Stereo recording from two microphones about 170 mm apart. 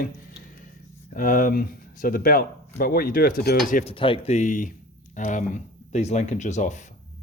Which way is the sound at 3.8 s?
30° left (ahead or behind).